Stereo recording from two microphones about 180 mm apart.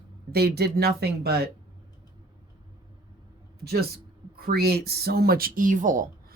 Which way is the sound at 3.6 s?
60° right (ahead or behind).